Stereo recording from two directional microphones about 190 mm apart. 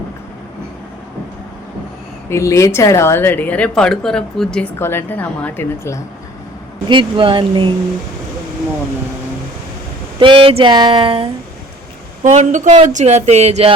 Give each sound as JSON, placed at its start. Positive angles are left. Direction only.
{"t": 2.3, "sound": "a woman's voice", "side_deg": 15}
{"t": 6.8, "sound": "speech", "side_deg": -25}
{"t": 10.2, "sound": "speech", "side_deg": -25}
{"t": 12.2, "sound": "a sound", "side_deg": -40}